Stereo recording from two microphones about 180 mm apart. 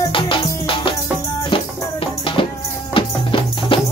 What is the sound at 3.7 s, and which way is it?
Music, 30° left (ahead or behind).